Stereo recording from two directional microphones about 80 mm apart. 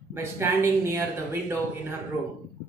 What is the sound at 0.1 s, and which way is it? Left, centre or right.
A man's voice, right.